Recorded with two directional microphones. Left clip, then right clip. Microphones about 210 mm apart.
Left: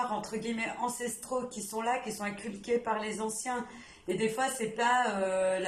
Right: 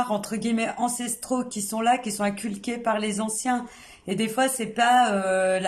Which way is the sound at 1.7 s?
50° right (ahead or behind).